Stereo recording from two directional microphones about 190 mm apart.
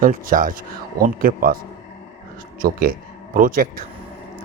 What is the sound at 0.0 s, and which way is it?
A man's voice, 45° right (ahead or behind).